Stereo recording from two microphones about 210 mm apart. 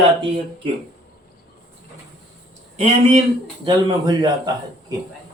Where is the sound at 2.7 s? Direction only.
30° right (ahead or behind).